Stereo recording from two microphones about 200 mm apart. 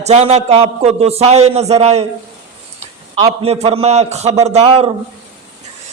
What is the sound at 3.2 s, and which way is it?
A man's voice, 30° right (ahead or behind).